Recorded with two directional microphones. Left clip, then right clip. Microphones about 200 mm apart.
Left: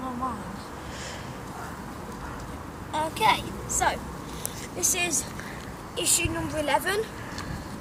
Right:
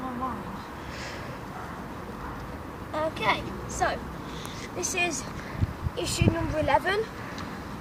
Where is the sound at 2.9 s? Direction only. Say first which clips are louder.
Left 3 dB; 20° left (ahead or behind).